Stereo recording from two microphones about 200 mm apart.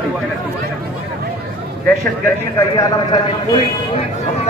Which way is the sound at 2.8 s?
25° left (ahead or behind).